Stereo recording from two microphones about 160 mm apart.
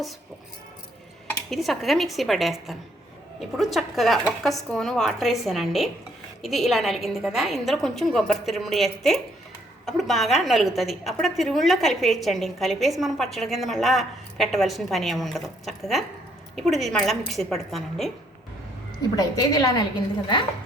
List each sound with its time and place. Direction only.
1.5 s a woman's voice: centre (ahead or behind)
19.1 s a woman's voice: 25° left (ahead or behind)